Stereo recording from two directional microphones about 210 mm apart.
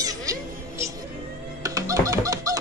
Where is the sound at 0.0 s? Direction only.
15° right (ahead or behind).